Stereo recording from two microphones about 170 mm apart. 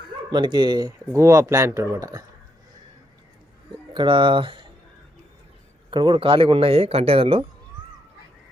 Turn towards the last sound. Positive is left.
turn(degrees=-30)  # may be behind; listen again after turning